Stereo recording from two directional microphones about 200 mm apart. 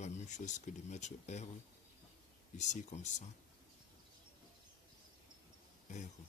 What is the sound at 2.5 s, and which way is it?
Speech, 35° left (ahead or behind).